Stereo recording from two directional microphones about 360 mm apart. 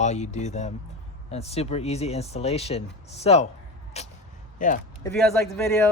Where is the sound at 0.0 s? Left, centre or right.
Centre.